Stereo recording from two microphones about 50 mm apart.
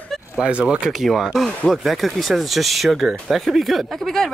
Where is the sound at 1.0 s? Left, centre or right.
Centre.